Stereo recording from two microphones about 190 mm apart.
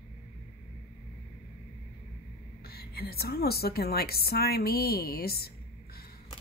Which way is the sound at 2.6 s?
55° left (ahead or behind).